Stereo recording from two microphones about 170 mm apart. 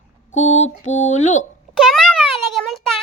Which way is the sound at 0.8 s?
45° left (ahead or behind).